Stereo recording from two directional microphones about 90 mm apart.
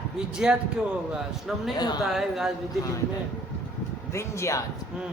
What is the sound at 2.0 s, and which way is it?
Speech, centre (ahead or behind).